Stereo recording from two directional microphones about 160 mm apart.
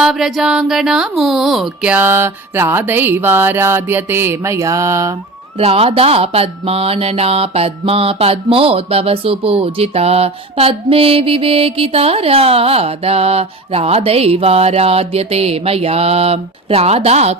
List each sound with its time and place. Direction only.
0.0 s speech: centre (ahead or behind); by 5.1 s 20° right (ahead or behind)
5.5 s speech: 40° right (ahead or behind)